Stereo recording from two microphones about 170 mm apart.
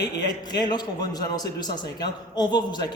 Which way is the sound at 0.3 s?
25° left (ahead or behind).